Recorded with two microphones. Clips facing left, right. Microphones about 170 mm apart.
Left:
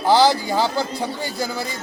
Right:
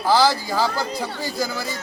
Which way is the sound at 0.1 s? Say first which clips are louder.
Left 3 dB; 20° left (ahead or behind).